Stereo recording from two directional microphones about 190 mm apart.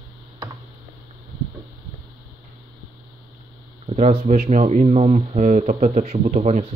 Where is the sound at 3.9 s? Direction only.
40° right (ahead or behind).